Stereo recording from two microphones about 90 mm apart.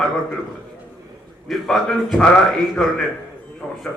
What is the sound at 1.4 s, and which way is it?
Speech, 5° left (ahead or behind).